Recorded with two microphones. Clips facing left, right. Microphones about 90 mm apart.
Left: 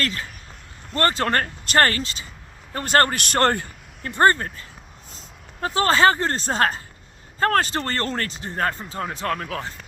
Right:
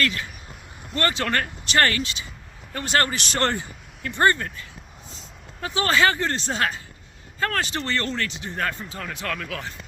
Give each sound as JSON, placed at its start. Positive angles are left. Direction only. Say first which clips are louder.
{"t": 0.0, "sound": "a man's voice", "louder": "right 2 dB", "side_deg": 35}
{"t": 4.0, "sound": "speech", "louder": "left 3 dB", "side_deg": 40}